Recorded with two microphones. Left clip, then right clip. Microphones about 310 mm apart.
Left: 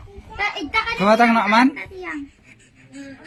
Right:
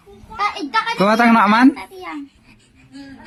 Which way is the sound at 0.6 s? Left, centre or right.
Centre.